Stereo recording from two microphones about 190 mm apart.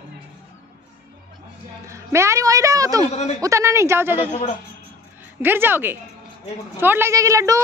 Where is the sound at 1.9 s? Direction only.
15° right (ahead or behind).